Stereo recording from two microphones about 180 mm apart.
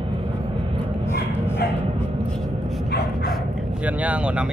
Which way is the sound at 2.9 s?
60° left (ahead or behind).